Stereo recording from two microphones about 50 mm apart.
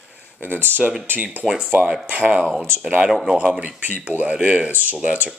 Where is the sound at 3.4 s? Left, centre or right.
Right.